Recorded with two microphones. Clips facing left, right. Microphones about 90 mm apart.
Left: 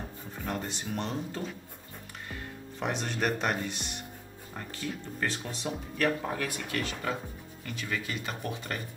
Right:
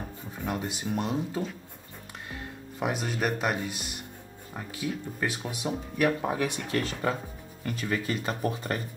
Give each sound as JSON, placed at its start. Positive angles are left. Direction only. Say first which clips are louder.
{"t": 0.4, "sound": "speech", "louder": "right 3 dB", "side_deg": -5}
{"t": 2.8, "sound": "speech", "louder": "right 2 dB", "side_deg": -5}
{"t": 6.7, "sound": "speech", "louder": "right 4 dB", "side_deg": -40}